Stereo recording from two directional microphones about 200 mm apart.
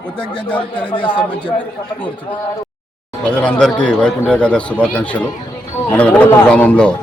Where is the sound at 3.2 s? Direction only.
5° left (ahead or behind).